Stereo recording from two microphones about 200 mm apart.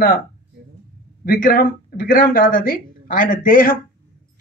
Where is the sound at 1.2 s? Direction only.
45° left (ahead or behind).